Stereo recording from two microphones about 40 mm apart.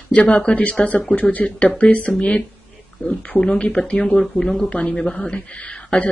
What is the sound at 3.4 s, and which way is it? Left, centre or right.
Speech, left.